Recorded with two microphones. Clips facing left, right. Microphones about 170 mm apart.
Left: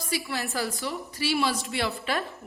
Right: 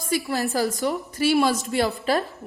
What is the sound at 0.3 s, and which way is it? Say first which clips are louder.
A woman's voice: right 7 dB; 40° right (ahead or behind).